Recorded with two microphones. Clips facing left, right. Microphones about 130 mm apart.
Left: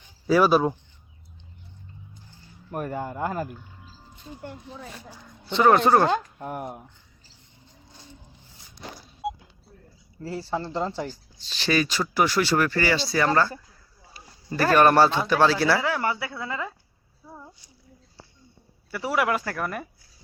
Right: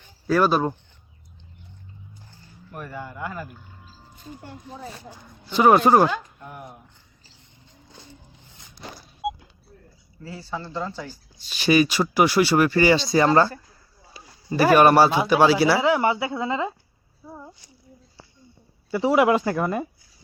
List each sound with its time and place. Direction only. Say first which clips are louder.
0.3 s speech: left 1 dB; 5° left (ahead or behind)
2.7 s speech: left 5 dB; 45° left (ahead or behind)
5.5 s speech: right 2 dB; 10° right (ahead or behind)
6.1 s speech: left 5 dB; 45° left (ahead or behind)
10.5 s speech: left 2 dB; 30° left (ahead or behind)
11.1 s speech: left 1 dB; 10° right (ahead or behind)
14.5 s speech: right 3 dB; 10° right (ahead or behind)
18.9 s speech: right 7 dB; 20° right (ahead or behind)